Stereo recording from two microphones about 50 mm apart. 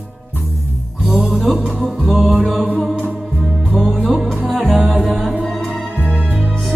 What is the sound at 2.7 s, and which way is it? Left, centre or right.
Music, centre.